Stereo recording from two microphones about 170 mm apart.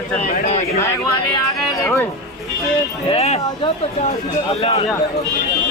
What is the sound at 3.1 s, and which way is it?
Speech, 40° left (ahead or behind).